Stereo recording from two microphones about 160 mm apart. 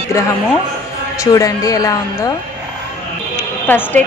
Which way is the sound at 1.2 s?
20° left (ahead or behind).